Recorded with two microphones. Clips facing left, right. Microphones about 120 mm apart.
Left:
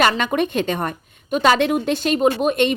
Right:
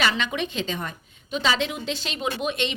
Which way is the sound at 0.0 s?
50° left (ahead or behind).